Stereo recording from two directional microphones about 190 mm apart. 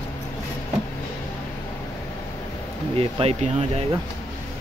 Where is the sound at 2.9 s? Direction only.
30° right (ahead or behind).